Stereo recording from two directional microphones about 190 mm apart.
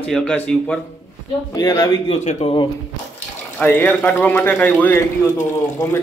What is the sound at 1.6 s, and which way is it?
Speech, 20° left (ahead or behind).